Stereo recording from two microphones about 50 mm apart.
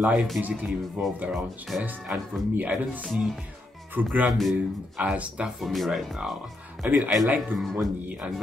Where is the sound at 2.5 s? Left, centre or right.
Right.